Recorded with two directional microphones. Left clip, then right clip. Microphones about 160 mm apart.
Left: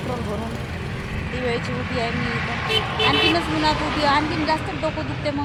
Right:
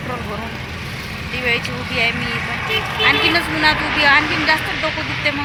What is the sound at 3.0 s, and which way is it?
Speech, 20° left (ahead or behind).